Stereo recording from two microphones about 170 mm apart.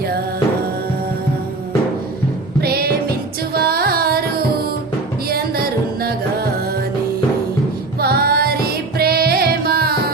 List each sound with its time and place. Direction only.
2.6 s music: 65° right (ahead or behind)
5.3 s music: 65° right (ahead or behind)
8.0 s music: 65° right (ahead or behind)